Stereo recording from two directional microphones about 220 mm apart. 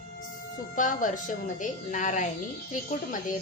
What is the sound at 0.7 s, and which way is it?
A woman's voice, 35° left (ahead or behind).